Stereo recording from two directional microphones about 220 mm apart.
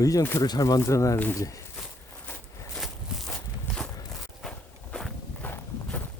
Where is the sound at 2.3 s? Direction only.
10° left (ahead or behind).